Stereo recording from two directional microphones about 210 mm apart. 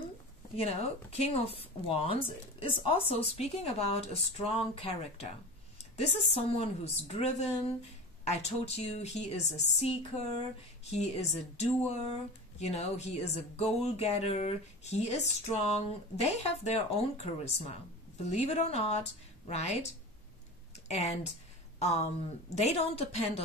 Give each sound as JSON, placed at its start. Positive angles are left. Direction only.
{"t": 0.6, "sound": "speech", "side_deg": 30}
{"t": 12.5, "sound": "speech", "side_deg": 30}
{"t": 20.9, "sound": "speech", "side_deg": 30}